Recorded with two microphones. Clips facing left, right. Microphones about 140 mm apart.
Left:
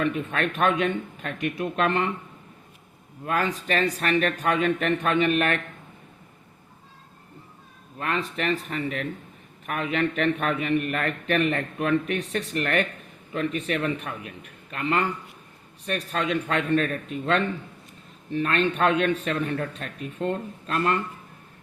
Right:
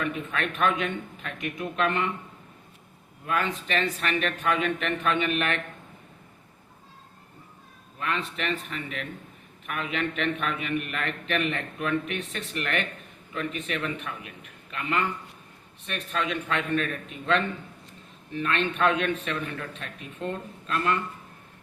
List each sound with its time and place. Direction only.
0.0 s a man's voice: 35° left (ahead or behind)
3.2 s a man's voice: 40° left (ahead or behind)
7.9 s a man's voice: 35° left (ahead or behind)